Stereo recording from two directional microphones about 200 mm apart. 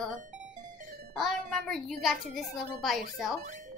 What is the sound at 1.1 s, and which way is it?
A woman's voice, centre (ahead or behind).